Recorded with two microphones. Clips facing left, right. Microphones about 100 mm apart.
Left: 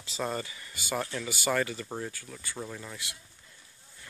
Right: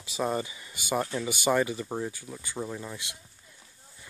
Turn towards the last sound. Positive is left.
turn(degrees=-20)  # may be behind; listen again after turning